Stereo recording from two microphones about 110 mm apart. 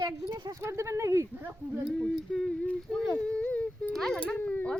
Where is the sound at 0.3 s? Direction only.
40° right (ahead or behind).